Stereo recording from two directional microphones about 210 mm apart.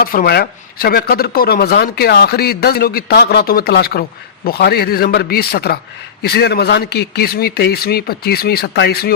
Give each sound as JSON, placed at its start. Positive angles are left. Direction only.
{"t": 0.0, "sound": "speech", "side_deg": 45}